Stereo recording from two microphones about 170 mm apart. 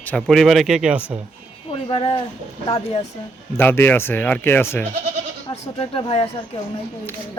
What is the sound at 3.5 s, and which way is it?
Speech, 10° left (ahead or behind).